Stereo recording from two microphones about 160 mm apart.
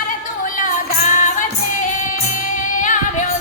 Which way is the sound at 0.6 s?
50° left (ahead or behind).